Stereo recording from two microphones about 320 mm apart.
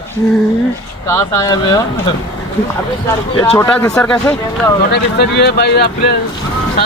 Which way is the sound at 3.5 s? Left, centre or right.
Centre.